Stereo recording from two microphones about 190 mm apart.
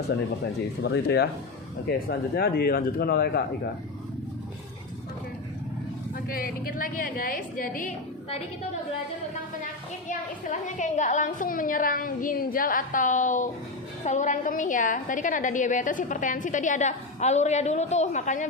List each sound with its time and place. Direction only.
0.8 s a woman's voice: 60° left (ahead or behind)
6.2 s a woman's voice: 50° left (ahead or behind)
10.1 s a woman's voice: 40° left (ahead or behind)